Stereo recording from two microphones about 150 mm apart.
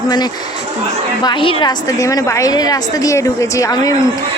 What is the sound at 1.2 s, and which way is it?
A woman's voice, 30° left (ahead or behind).